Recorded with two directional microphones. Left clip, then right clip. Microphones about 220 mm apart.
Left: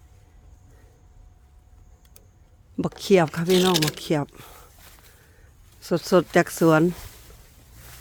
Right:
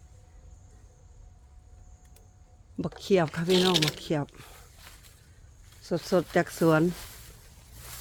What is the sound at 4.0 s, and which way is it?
Speech, 25° left (ahead or behind).